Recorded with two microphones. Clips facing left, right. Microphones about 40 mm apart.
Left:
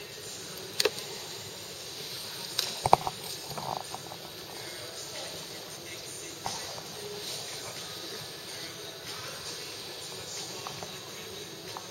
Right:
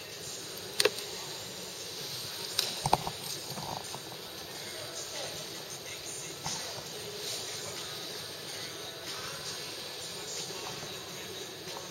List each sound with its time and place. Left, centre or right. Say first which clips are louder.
0.8 s insect: right 1 dB; centre
2.8 s stomach rumble: left 7 dB; centre